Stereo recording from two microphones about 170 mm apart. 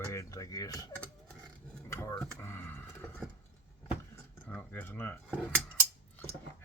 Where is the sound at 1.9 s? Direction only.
15° left (ahead or behind).